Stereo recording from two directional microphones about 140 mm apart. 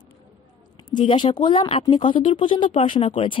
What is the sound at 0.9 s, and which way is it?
A woman's voice, 35° left (ahead or behind).